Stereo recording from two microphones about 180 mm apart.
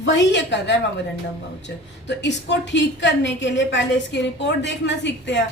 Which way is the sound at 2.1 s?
75° left (ahead or behind).